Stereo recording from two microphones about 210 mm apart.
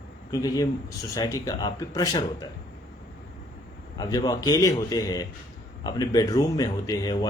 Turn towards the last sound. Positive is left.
turn(degrees=20)  # may be behind; listen again after turning